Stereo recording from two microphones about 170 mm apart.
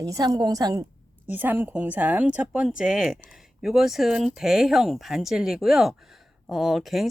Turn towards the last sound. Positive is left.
turn(degrees=0)  # may be behind; listen again after turning